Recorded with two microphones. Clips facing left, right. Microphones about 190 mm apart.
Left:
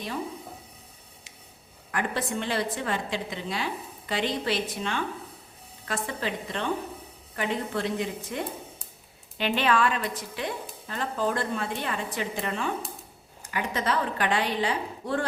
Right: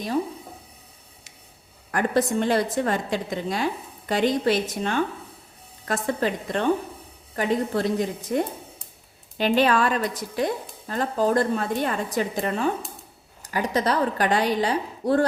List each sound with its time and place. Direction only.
1.9 s a woman's voice: 45° right (ahead or behind)